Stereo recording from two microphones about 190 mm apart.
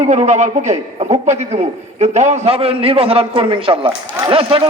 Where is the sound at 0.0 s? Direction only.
35° right (ahead or behind).